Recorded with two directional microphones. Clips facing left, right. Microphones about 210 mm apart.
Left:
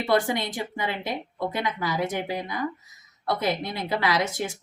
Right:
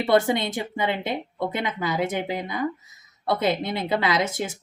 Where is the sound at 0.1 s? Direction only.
25° right (ahead or behind).